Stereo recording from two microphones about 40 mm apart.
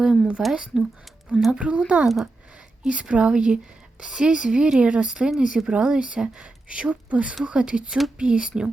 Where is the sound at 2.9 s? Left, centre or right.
Right.